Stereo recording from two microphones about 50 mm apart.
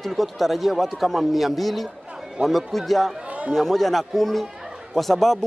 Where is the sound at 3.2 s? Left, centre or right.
Right.